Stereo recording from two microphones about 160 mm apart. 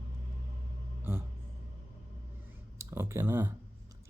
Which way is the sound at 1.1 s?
15° right (ahead or behind).